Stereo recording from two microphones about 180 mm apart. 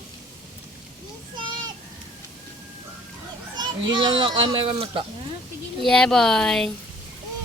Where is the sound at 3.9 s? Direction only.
25° right (ahead or behind).